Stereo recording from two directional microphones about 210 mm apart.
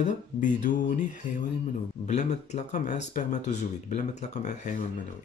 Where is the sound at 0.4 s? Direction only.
35° left (ahead or behind).